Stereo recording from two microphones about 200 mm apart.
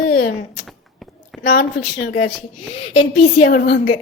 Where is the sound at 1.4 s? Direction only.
45° left (ahead or behind).